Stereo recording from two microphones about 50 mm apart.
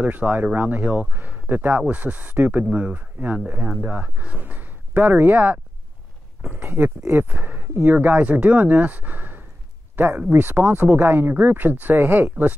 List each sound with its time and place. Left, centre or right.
0.0 s speech: right
6.6 s speech: right